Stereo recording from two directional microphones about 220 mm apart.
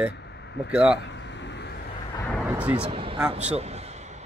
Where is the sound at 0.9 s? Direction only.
55° left (ahead or behind).